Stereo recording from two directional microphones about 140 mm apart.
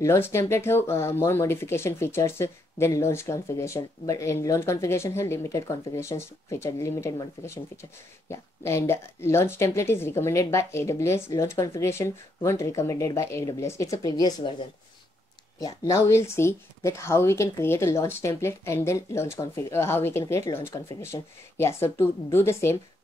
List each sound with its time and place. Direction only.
0.0 s speech: 20° left (ahead or behind)
15.6 s speech: 20° left (ahead or behind)